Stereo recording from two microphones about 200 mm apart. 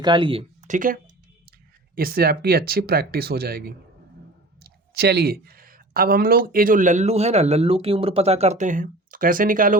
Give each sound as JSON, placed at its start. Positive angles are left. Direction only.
{"t": 0.0, "sound": "speech", "side_deg": -25}
{"t": 2.0, "sound": "speech", "side_deg": -50}